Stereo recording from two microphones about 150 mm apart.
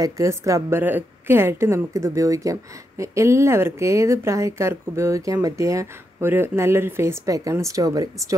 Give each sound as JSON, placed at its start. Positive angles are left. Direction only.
{"t": 0.0, "sound": "a woman's voice", "side_deg": -20}